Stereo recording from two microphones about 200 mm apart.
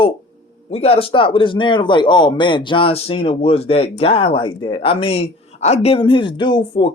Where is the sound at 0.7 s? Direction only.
30° left (ahead or behind).